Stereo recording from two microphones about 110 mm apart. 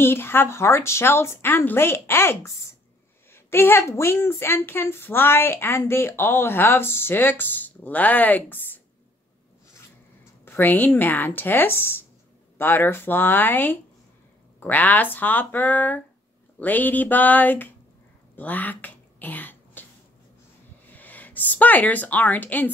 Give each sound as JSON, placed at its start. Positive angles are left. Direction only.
{"t": 0.0, "sound": "a woman's voice", "side_deg": 20}
{"t": 10.4, "sound": "a woman's voice", "side_deg": 15}
{"t": 18.3, "sound": "throat clearing", "side_deg": 15}
{"t": 20.8, "sound": "speech", "side_deg": 15}